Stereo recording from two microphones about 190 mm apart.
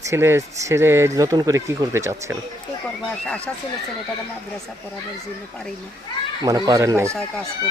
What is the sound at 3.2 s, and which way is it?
Speech, 5° left (ahead or behind).